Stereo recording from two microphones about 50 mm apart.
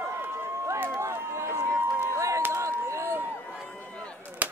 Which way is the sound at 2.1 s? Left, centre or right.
Right.